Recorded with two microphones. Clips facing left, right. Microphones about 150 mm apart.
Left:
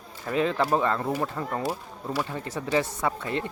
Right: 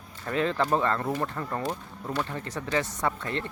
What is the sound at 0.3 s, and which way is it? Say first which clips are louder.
Speech: left 2 dB; 10° left (ahead or behind).